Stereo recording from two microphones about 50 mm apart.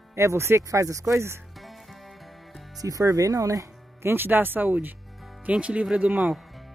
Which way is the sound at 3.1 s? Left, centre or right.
Right.